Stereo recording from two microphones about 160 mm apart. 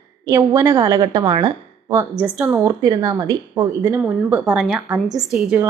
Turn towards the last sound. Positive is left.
turn(degrees=-5)  # may be behind; listen again after turning